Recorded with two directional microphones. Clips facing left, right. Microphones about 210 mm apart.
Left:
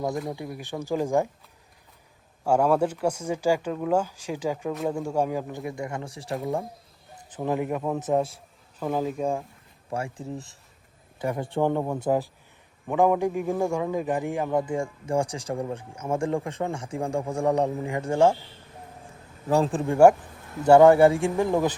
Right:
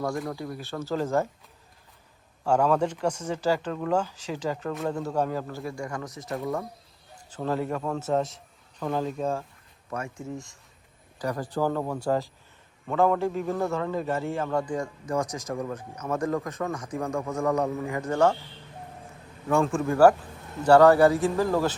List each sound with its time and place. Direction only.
0.3 s speech: 20° left (ahead or behind)
2.4 s a man's voice: 10° left (ahead or behind); by 6.7 s 30° left (ahead or behind)
7.2 s speech: 20° left (ahead or behind)
9.9 s speech: 30° left (ahead or behind)
11.2 s a man's voice: 25° left (ahead or behind)
19.5 s a man's voice: 35° left (ahead or behind); by 21.8 s 20° left (ahead or behind)